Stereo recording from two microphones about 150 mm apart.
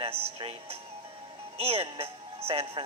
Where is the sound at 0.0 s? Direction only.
40° right (ahead or behind).